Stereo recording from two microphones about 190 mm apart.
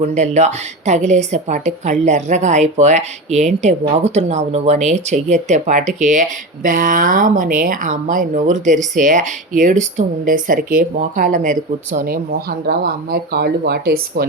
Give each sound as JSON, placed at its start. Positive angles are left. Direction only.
{"t": 0.1, "sound": "a woman's voice", "side_deg": -35}